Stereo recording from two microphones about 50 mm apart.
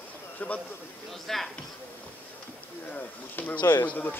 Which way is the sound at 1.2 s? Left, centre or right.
Centre.